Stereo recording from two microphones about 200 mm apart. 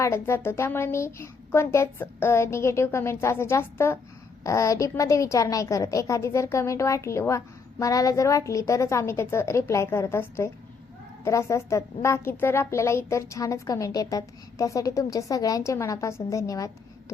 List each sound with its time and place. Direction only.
0.0 s a woman's voice: 15° left (ahead or behind)